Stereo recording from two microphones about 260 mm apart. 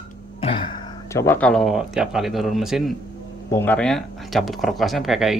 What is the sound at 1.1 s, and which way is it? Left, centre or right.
Speech, centre.